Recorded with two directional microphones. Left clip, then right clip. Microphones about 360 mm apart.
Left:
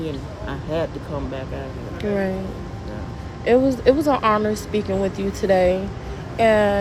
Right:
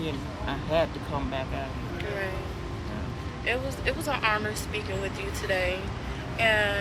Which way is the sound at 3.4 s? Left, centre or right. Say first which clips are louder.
Left 13 dB; left.